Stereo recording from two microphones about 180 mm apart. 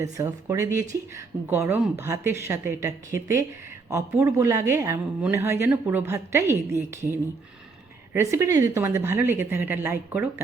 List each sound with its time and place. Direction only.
0.0 s speech: 15° right (ahead or behind)